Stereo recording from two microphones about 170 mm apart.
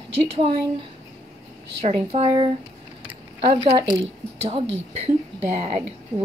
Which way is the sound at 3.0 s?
30° right (ahead or behind).